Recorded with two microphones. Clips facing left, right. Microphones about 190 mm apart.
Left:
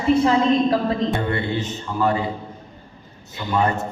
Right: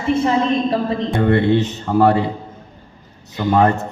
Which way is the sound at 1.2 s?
70° right (ahead or behind).